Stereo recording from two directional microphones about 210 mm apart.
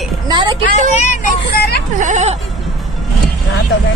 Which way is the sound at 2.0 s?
35° right (ahead or behind).